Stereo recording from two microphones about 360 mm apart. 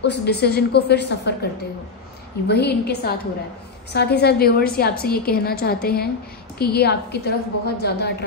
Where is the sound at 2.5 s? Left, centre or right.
Left.